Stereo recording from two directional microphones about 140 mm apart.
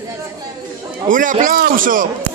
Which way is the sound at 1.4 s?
90° right.